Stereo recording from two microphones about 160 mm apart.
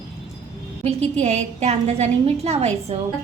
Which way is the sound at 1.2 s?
40° right (ahead or behind).